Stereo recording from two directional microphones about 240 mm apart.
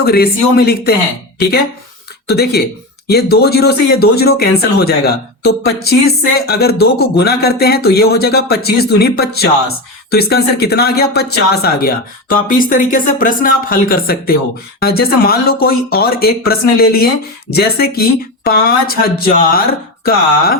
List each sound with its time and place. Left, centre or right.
0.0 s speech: left